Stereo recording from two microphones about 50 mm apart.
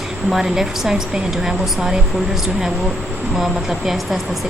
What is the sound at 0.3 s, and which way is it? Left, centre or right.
Speech, centre.